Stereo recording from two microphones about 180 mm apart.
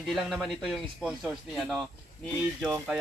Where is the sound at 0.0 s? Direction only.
Centre (ahead or behind).